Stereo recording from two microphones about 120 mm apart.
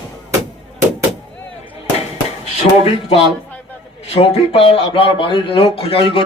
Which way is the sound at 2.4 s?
60° left (ahead or behind).